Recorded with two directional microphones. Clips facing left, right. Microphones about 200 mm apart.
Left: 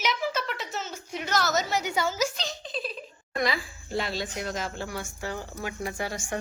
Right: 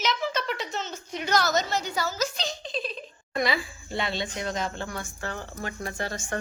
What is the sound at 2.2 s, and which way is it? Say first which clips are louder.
A woman's voice: even; centre (ahead or behind).